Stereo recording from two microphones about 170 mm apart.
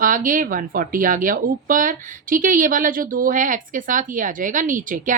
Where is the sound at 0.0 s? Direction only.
50° right (ahead or behind).